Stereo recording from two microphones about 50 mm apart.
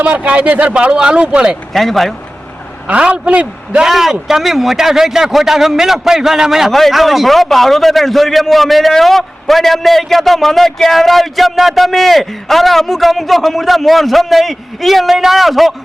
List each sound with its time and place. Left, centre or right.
0.0 s a man's voice: right
1.7 s a man's voice: centre
2.8 s a man's voice: right
3.8 s a man's voice: centre
6.7 s a man's voice: centre